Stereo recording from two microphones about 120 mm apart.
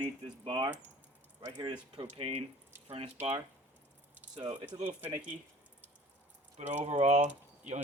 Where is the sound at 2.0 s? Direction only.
55° right (ahead or behind).